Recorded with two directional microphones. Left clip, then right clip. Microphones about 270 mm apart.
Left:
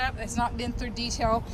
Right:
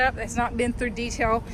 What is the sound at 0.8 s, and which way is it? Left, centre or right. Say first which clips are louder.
Speech: right 4 dB; left.